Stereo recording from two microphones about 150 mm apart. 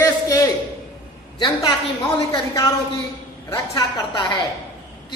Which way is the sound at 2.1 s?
25° left (ahead or behind).